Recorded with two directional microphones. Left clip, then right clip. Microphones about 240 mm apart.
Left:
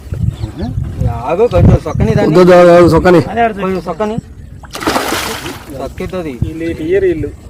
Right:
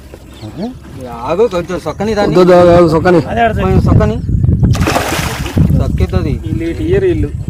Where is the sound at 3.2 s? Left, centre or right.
Right.